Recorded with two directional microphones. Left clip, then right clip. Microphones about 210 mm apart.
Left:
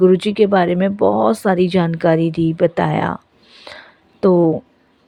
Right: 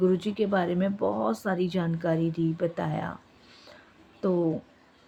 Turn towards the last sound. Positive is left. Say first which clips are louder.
# left 14 dB
turn(degrees=40)  # may be behind; listen again after turning